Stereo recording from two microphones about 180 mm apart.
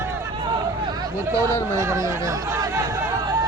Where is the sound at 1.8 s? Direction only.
15° right (ahead or behind).